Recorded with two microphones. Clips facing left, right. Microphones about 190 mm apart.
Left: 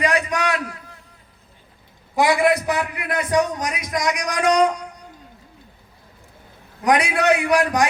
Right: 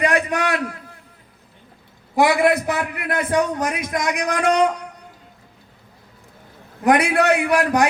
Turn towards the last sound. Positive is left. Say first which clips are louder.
# right 1 dB
turn(degrees=-60)  # may be behind; listen again after turning